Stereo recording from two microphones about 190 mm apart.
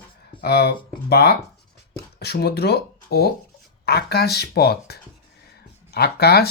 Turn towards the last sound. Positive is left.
turn(degrees=55)  # may be behind; listen again after turning